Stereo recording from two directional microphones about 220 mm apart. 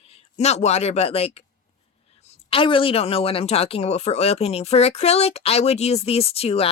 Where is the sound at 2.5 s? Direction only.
25° left (ahead or behind).